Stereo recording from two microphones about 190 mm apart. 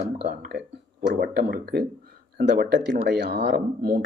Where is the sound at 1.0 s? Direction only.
50° right (ahead or behind).